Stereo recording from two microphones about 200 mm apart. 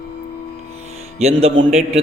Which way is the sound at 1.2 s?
30° right (ahead or behind).